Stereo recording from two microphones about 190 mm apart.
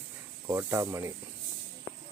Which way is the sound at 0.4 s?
15° right (ahead or behind).